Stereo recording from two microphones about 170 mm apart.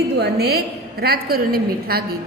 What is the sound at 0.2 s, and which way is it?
A woman's voice, 70° right (ahead or behind).